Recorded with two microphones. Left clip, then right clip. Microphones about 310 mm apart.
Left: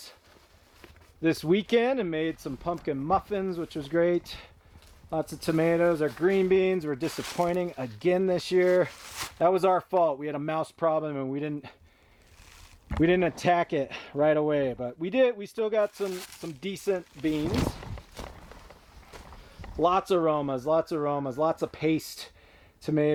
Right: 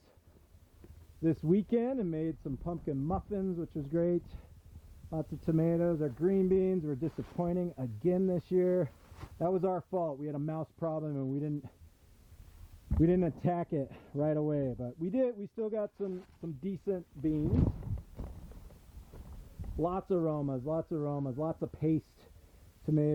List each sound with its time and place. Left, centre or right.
1.2 s speech: centre
12.9 s speech: centre
19.1 s a sound: centre
19.9 s speech: centre